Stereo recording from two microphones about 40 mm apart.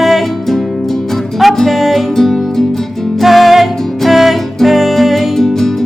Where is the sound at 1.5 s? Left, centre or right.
Centre.